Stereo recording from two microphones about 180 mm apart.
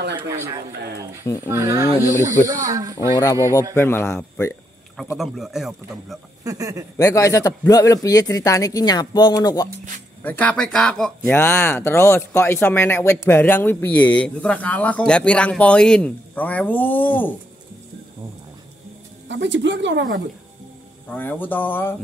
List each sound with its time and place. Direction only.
0.1 s speech: 10° right (ahead or behind)
1.2 s speech: 15° left (ahead or behind)
1.5 s speech: 15° right (ahead or behind)
2.0 s speech: 15° left (ahead or behind)
2.4 s speech: 20° right (ahead or behind)
3.7 s speech: 15° left (ahead or behind)
5.1 s a man's voice: centre (ahead or behind)
6.4 s speech: 20° right (ahead or behind)
7.0 s speech: 20° left (ahead or behind)
10.2 s speech: 10° left (ahead or behind)
19.2 s speech: 90° right
21.1 s speech: 10° left (ahead or behind)